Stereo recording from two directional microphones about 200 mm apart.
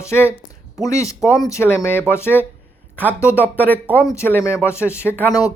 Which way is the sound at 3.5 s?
10° right (ahead or behind).